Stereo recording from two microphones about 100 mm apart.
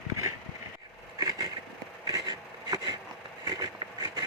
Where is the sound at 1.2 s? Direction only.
40° right (ahead or behind).